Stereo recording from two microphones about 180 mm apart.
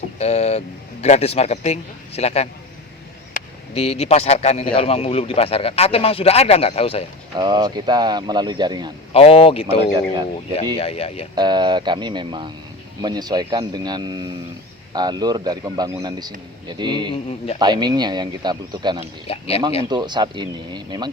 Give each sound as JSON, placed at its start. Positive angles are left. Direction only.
{"t": 0.2, "sound": "speech", "side_deg": 35}
{"t": 3.3, "sound": "a sound", "side_deg": 50}
{"t": 3.8, "sound": "speech", "side_deg": 35}
{"t": 7.3, "sound": "speech", "side_deg": -25}
{"t": 9.1, "sound": "speech", "side_deg": 30}
{"t": 11.3, "sound": "speech", "side_deg": -25}
{"t": 17.2, "sound": "speech", "side_deg": 35}
{"t": 17.6, "sound": "speech", "side_deg": -25}
{"t": 19.3, "sound": "speech", "side_deg": 35}
{"t": 19.9, "sound": "speech", "side_deg": -25}